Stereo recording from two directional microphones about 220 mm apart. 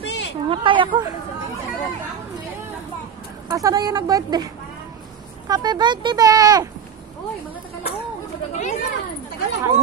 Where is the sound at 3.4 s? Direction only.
15° right (ahead or behind).